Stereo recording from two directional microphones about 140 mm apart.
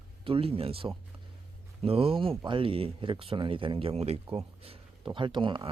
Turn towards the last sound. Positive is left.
turn(degrees=-35)  # may be behind; listen again after turning